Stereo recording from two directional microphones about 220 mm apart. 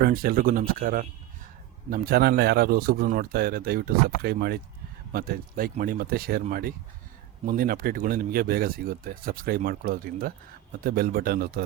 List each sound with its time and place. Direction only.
0.0 s a man's voice: 40° right (ahead or behind)